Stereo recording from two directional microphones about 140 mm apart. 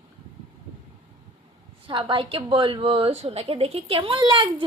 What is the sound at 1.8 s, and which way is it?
A woman's voice, 35° right (ahead or behind).